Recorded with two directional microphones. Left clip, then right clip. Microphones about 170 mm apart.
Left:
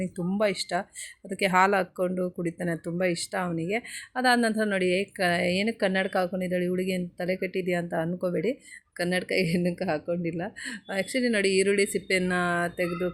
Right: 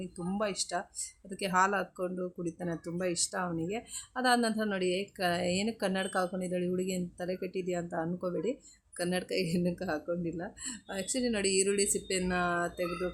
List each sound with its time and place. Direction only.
0.0 s speech: 15° left (ahead or behind)